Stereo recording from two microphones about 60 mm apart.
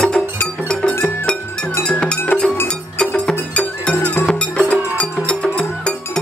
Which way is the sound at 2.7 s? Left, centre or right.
Centre.